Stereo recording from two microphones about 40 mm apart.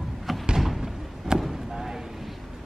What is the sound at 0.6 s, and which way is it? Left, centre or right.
Thump, centre.